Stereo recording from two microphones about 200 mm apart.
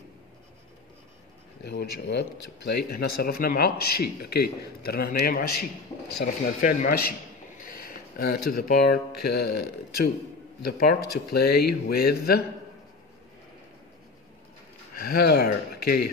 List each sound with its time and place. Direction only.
1.7 s speech: 55° left (ahead or behind)
7.5 s a sound: 45° left (ahead or behind)
8.5 s speech: 50° left (ahead or behind)
15.0 s speech: 50° left (ahead or behind)